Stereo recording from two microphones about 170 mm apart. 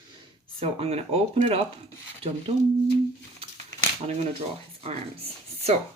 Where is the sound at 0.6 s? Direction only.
35° right (ahead or behind).